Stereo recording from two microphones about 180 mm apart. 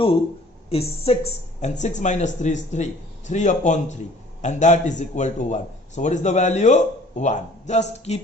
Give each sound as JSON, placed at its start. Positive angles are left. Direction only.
{"t": 0.7, "sound": "a man's voice", "side_deg": 35}